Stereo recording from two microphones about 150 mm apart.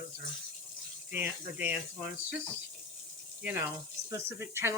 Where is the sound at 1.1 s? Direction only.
10° right (ahead or behind).